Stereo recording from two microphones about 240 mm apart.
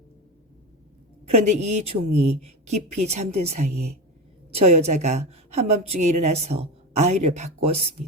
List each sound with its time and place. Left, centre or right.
1.3 s a woman's voice: right